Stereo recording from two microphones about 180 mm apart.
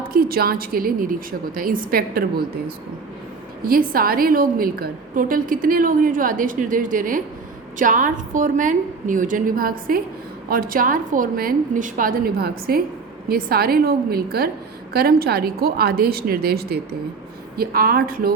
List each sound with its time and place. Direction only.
0.1 s a woman's voice: 55° right (ahead or behind)